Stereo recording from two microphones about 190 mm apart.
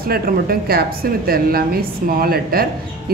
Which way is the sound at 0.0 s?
50° right (ahead or behind).